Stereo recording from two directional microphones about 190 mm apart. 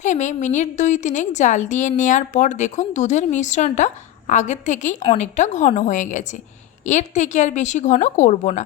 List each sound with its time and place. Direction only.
0.0 s a woman's voice: 40° left (ahead or behind)